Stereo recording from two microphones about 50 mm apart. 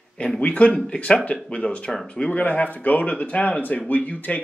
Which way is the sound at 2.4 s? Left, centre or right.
Left.